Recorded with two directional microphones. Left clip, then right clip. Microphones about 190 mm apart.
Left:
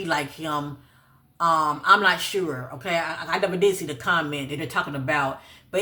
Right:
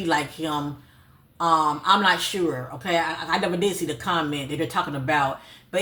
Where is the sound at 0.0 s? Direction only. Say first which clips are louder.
Right 2 dB; 25° left (ahead or behind).